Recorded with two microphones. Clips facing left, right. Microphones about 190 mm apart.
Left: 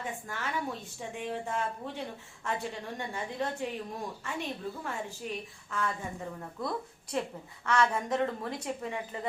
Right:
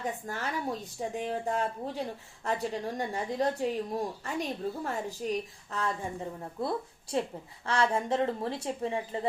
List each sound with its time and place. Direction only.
0.0 s speech: 40° right (ahead or behind)